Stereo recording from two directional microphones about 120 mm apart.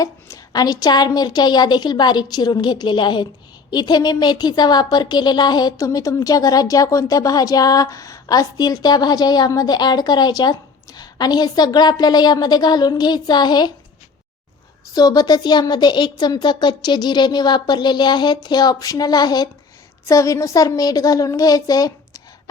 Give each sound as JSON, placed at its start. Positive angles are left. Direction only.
{"t": 0.0, "sound": "speech", "side_deg": 30}
{"t": 14.9, "sound": "speech", "side_deg": 30}